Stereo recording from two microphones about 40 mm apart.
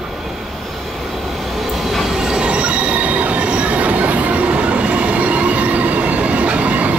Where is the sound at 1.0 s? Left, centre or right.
Centre.